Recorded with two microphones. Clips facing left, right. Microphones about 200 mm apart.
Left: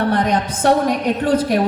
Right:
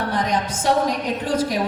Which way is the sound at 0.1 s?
60° left (ahead or behind).